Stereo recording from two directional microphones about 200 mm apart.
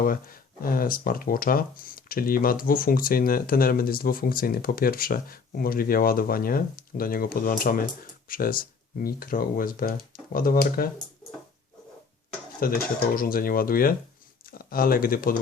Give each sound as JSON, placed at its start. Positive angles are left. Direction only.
{"t": 0.0, "sound": "speech", "side_deg": 45}
{"t": 12.5, "sound": "speech", "side_deg": 45}